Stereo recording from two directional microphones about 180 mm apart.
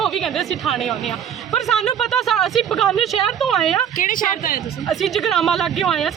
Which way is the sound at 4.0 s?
50° left (ahead or behind).